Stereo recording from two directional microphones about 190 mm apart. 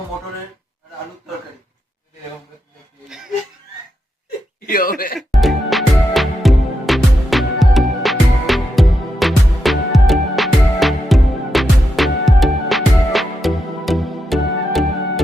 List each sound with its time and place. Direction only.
4.6 s speech: 50° left (ahead or behind)
5.3 s music: centre (ahead or behind)